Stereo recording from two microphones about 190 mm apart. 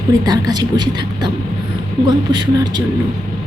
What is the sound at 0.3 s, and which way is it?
A woman's voice, 20° right (ahead or behind).